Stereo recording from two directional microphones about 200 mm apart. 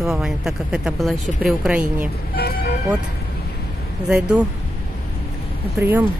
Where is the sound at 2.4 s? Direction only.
50° left (ahead or behind).